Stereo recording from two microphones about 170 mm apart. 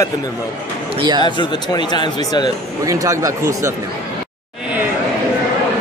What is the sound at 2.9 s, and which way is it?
Speech, 20° right (ahead or behind).